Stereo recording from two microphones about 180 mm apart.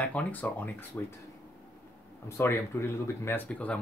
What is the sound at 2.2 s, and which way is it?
Speech, 15° left (ahead or behind).